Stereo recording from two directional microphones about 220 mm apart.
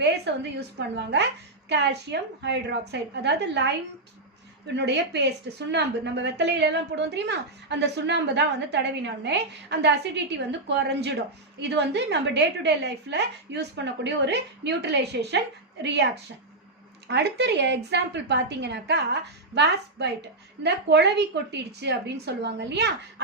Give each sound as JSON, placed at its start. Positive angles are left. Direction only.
{"t": 0.0, "sound": "a woman's voice", "side_deg": -50}
{"t": 4.7, "sound": "a woman's voice", "side_deg": -50}
{"t": 17.1, "sound": "a woman's voice", "side_deg": -50}